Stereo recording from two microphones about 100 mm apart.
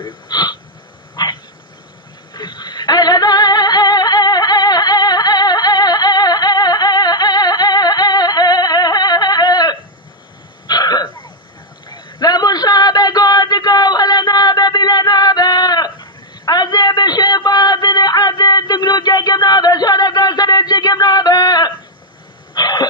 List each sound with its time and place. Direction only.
0.0 s wheeze: 50° left (ahead or behind)
1.1 s dog: 50° left (ahead or behind)
2.3 s female singing: 50° left (ahead or behind)
10.7 s throat clearing: 40° left (ahead or behind)
11.9 s a sound: 50° left (ahead or behind)
22.5 s throat clearing: 45° left (ahead or behind)